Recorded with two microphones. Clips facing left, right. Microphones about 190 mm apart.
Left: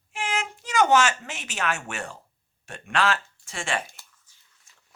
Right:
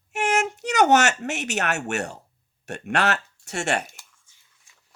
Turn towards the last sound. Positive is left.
turn(degrees=-70)  # may be behind; listen again after turning